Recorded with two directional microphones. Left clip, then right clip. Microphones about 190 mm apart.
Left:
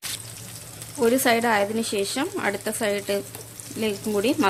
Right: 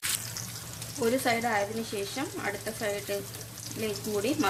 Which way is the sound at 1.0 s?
35° left (ahead or behind).